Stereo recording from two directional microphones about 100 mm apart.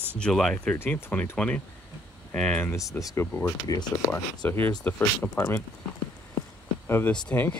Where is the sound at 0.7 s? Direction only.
20° left (ahead or behind).